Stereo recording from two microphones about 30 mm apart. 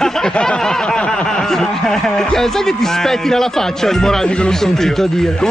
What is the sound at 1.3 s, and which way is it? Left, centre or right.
A man's voice, centre.